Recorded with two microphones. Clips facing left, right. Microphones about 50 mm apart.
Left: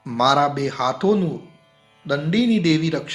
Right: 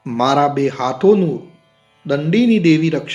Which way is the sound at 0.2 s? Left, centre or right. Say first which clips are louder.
Right 3 dB; right.